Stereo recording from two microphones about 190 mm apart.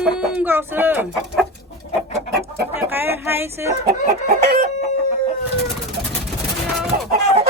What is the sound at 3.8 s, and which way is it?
Chicken, 60° right (ahead or behind).